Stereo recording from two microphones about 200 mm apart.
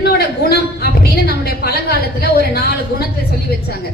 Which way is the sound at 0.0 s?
50° left (ahead or behind).